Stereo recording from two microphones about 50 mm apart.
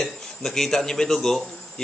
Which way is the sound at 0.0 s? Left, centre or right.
Centre.